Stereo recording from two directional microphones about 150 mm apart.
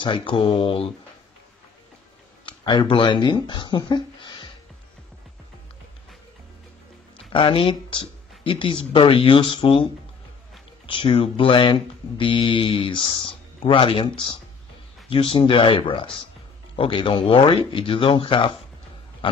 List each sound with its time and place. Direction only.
0.0 s speech: 30° left (ahead or behind)
2.4 s speech: 30° left (ahead or behind)
7.3 s speech: 35° left (ahead or behind)
10.9 s speech: 35° left (ahead or behind)